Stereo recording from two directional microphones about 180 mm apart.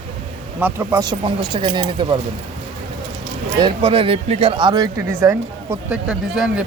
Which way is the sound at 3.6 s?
30° right (ahead or behind).